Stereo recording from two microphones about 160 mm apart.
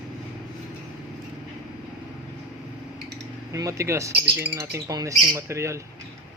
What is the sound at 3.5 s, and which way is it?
Speech, 20° right (ahead or behind).